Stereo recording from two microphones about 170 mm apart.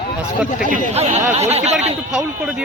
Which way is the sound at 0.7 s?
45° right (ahead or behind).